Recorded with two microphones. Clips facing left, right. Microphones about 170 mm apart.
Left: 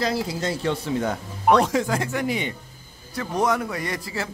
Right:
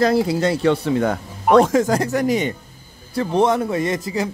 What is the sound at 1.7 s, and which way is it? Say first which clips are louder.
Speech: right 6 dB; 40° right (ahead or behind).